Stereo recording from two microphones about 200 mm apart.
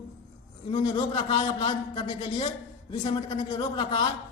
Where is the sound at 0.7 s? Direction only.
25° left (ahead or behind).